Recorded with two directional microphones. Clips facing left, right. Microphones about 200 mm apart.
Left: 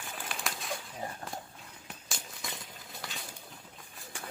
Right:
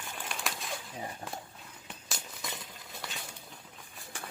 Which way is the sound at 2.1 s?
Centre (ahead or behind).